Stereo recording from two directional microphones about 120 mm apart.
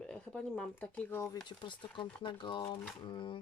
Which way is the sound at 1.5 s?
40° left (ahead or behind).